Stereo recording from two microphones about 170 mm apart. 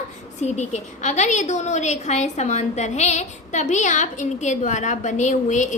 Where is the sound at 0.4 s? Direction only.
40° left (ahead or behind).